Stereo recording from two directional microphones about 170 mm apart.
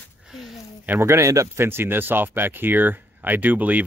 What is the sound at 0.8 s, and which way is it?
Speech, 15° right (ahead or behind).